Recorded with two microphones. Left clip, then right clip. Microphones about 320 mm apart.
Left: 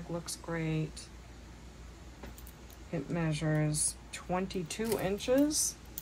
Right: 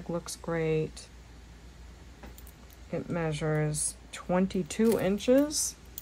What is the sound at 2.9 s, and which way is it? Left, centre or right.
Speech, right.